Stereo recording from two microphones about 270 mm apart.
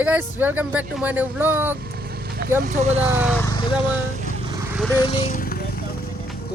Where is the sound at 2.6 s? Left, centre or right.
Right.